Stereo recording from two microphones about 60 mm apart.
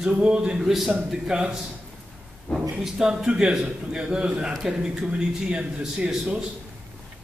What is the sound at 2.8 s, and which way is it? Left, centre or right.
A man's voice, centre.